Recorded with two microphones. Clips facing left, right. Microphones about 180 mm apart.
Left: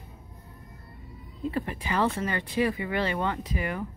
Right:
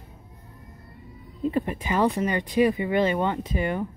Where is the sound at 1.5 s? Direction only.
20° right (ahead or behind).